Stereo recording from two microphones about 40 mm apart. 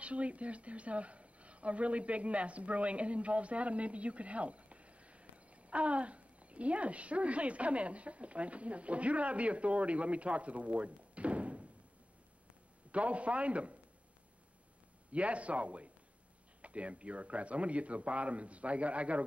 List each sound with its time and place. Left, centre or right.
0.0 s speech: right
12.9 s a man's voice: right
15.0 s a man's voice: right